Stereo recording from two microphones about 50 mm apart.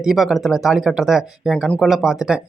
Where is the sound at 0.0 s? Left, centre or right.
Centre.